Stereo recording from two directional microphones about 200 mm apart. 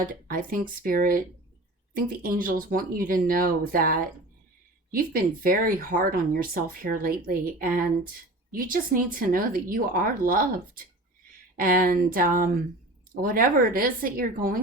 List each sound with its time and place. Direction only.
0.1 s speech: 45° right (ahead or behind)